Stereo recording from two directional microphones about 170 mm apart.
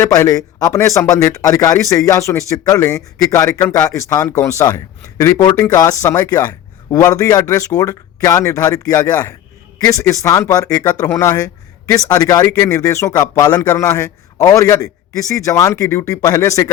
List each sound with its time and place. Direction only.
0.0 s speech: 20° left (ahead or behind)